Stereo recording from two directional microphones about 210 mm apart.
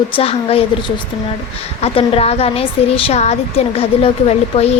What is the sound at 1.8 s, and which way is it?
A woman's voice, 30° left (ahead or behind).